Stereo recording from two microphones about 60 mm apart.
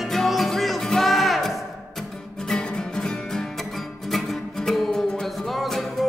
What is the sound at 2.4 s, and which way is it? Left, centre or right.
Music, centre.